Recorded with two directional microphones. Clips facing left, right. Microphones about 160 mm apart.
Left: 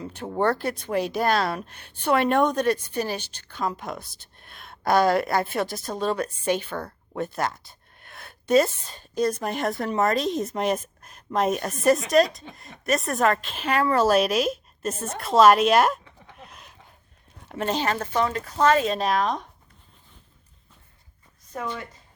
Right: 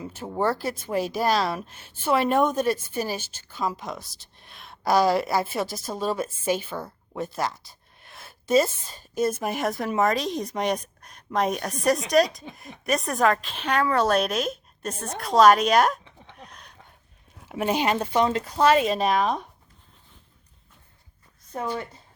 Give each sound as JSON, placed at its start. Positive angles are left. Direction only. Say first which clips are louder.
{"t": 0.0, "sound": "speech", "louder": "left 1 dB", "side_deg": -5}
{"t": 8.0, "sound": "a sound", "louder": "left 2 dB", "side_deg": 0}
{"t": 8.9, "sound": "speech", "louder": "left 1 dB", "side_deg": -5}
{"t": 16.3, "sound": "a sound", "louder": "even", "side_deg": 5}
{"t": 17.5, "sound": "speech", "louder": "right 2 dB", "side_deg": -10}
{"t": 18.9, "sound": "speech", "louder": "right 1 dB", "side_deg": 0}
{"t": 21.5, "sound": "a woman's voice", "louder": "right 2 dB", "side_deg": -30}